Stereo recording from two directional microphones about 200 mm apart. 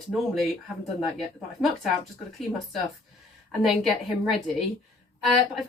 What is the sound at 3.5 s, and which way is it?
A woman's voice, centre (ahead or behind).